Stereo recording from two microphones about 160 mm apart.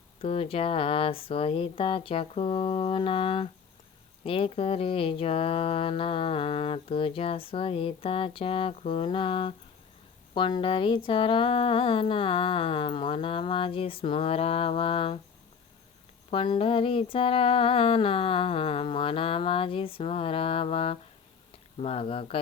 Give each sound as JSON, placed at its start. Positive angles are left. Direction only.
{"t": 0.2, "sound": "speech", "side_deg": 35}
{"t": 16.3, "sound": "speech", "side_deg": 35}